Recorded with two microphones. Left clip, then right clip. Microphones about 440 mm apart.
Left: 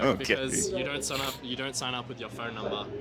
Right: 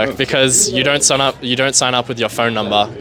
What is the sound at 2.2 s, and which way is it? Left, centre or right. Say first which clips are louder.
Speech: right 19 dB; right.